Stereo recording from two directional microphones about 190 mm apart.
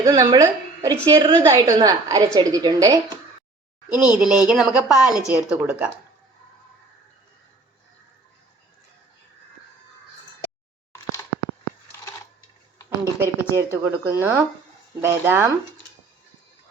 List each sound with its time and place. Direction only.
0.0 s a woman's voice: 15° right (ahead or behind)
3.8 s speech: 5° right (ahead or behind)
10.9 s a sound: 20° left (ahead or behind)
13.2 s speech: 15° right (ahead or behind)